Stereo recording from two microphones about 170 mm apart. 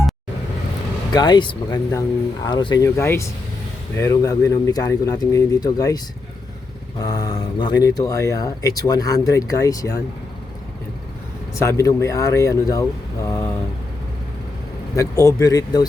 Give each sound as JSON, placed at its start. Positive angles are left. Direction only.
{"t": 1.1, "sound": "speech", "side_deg": 25}
{"t": 7.0, "sound": "speech", "side_deg": 20}
{"t": 11.6, "sound": "speech", "side_deg": 15}
{"t": 13.2, "sound": "mantra", "side_deg": 15}
{"t": 14.9, "sound": "speech", "side_deg": 20}